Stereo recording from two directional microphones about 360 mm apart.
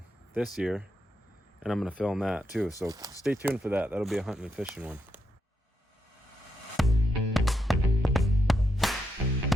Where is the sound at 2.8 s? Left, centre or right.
Centre.